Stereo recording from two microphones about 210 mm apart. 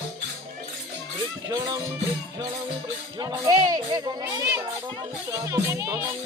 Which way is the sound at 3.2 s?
20° right (ahead or behind).